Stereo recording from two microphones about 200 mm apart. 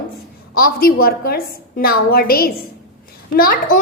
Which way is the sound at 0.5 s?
50° left (ahead or behind).